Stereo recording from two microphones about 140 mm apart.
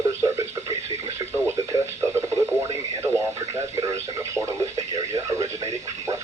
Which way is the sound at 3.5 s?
25° right (ahead or behind).